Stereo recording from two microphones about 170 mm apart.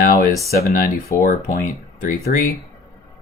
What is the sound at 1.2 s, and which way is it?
Speech, 50° left (ahead or behind).